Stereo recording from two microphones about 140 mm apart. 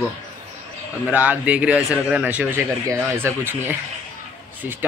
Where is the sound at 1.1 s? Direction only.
10° right (ahead or behind).